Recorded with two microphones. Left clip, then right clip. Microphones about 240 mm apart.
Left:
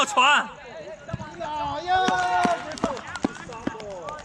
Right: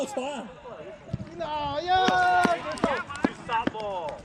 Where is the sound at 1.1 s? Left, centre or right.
Centre.